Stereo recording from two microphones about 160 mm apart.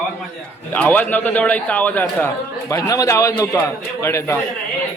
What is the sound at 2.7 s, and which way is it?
A man's voice, 20° left (ahead or behind).